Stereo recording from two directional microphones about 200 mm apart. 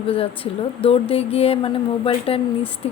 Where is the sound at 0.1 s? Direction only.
30° left (ahead or behind).